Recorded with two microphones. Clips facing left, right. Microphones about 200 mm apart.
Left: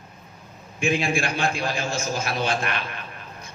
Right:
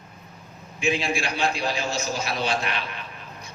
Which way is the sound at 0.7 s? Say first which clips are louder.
Left 2 dB; 50° left (ahead or behind).